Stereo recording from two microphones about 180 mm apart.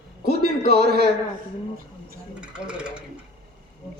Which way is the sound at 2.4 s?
5° right (ahead or behind).